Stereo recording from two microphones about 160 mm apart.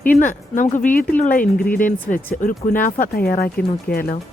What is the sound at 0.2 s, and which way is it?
Speech, 55° left (ahead or behind).